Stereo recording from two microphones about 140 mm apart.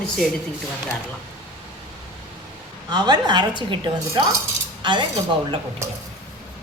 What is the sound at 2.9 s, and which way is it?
A woman's voice, 30° right (ahead or behind).